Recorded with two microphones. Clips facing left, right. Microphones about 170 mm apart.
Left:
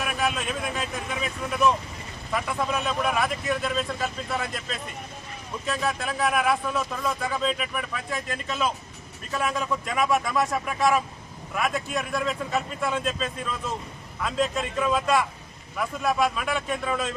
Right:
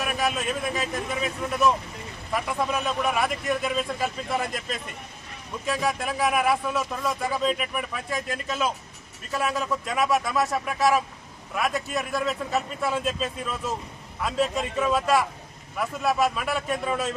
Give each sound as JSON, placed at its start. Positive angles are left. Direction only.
{"t": 0.0, "sound": "a man's voice", "side_deg": -5}
{"t": 5.6, "sound": "a man's voice", "side_deg": -10}